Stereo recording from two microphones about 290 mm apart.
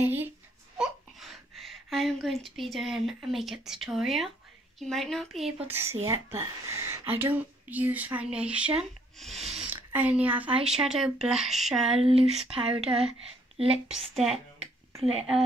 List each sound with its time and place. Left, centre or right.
0.0 s speech: centre
9.4 s a sound: centre
10.6 s speech: centre
12.0 s speech: centre
13.8 s speech: centre